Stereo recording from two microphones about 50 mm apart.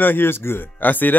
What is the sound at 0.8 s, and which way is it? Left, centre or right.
Speech, left.